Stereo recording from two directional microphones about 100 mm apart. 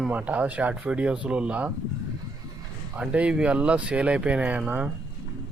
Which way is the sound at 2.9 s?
15° right (ahead or behind).